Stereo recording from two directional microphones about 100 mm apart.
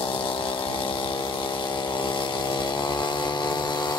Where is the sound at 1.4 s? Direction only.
55° left (ahead or behind).